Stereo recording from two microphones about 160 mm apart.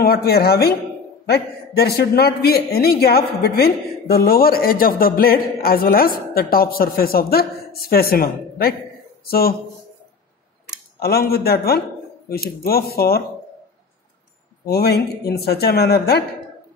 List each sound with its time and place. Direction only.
0.0 s a man's voice: 70° left (ahead or behind)
1.2 s a man's voice: 90° left; by 9.6 s 70° left (ahead or behind)
11.0 s a man's voice: 75° left (ahead or behind)
14.7 s speech: 80° left